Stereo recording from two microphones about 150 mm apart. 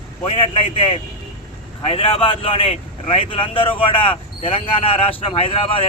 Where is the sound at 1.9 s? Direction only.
40° left (ahead or behind).